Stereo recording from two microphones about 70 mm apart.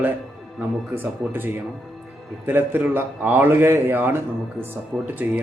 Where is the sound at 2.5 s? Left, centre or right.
Right.